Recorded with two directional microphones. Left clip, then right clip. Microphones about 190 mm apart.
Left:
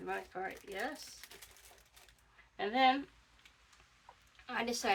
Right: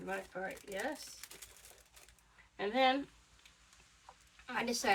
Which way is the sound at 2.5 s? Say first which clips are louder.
Left 1 dB; 10° left (ahead or behind).